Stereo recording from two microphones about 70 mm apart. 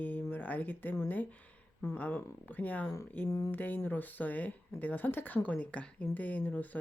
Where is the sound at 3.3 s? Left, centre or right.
Left.